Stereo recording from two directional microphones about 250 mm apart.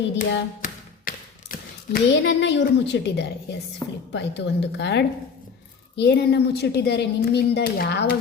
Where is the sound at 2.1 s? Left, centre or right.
Left.